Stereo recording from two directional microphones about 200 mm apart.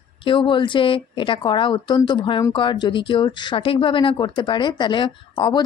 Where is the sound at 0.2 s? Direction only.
25° left (ahead or behind).